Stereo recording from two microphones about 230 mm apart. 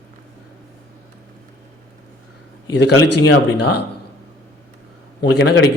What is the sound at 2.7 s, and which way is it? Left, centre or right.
Speech, left.